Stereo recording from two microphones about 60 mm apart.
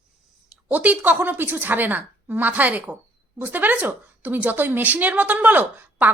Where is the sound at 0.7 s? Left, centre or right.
Right.